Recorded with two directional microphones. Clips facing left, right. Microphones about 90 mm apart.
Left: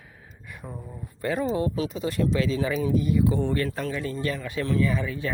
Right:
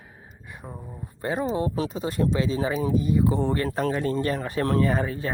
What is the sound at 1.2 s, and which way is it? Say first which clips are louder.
Speech: even; 25° right (ahead or behind).